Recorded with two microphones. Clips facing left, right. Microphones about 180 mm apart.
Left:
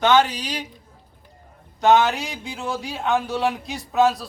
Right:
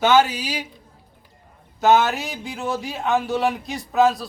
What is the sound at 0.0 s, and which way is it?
Speech, 5° right (ahead or behind).